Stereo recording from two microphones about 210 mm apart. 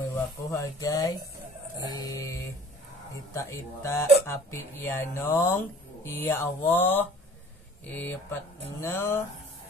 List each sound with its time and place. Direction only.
0.1 s speech: 15° left (ahead or behind)